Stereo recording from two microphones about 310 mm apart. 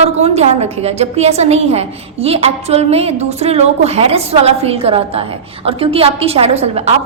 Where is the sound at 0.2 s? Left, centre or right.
Centre.